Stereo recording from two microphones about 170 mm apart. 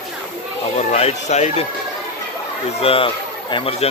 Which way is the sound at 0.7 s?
40° left (ahead or behind).